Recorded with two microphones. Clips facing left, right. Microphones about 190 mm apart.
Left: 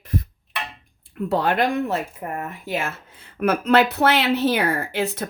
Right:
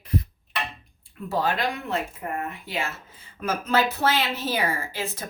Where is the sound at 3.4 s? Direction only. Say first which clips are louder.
Left 6 dB; 65° left (ahead or behind).